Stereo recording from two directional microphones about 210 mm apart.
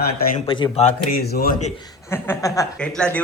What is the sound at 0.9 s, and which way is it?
Speech, 45° left (ahead or behind).